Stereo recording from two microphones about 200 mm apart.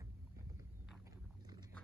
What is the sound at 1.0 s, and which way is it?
Dog, 20° right (ahead or behind).